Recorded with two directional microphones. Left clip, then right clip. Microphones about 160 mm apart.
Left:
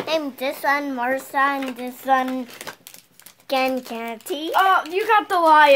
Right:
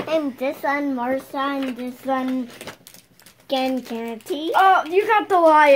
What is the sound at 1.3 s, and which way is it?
Speech, 55° left (ahead or behind).